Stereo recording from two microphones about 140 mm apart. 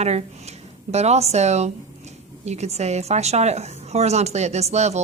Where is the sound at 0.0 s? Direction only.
50° right (ahead or behind).